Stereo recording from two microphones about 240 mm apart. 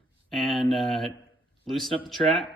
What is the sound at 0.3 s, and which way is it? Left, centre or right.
A man's voice, centre.